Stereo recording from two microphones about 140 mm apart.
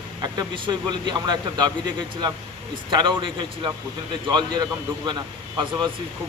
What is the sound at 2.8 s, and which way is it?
Speech, 35° right (ahead or behind).